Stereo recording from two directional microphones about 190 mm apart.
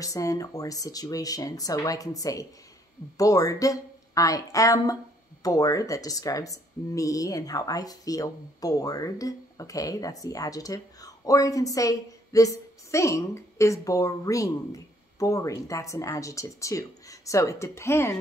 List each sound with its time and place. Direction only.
0.0 s speech: 20° left (ahead or behind)